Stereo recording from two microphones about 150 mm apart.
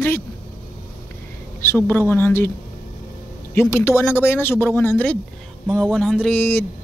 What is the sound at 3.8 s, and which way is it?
Speech, 15° left (ahead or behind).